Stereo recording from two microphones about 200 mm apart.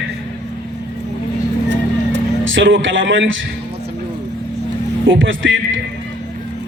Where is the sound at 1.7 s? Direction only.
70° right (ahead or behind).